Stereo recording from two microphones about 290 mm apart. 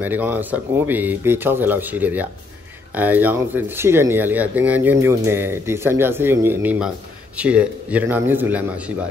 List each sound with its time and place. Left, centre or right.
0.0 s a man's voice: centre